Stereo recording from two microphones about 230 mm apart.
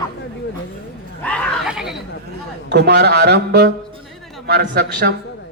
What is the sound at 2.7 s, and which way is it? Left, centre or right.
A man's voice, right.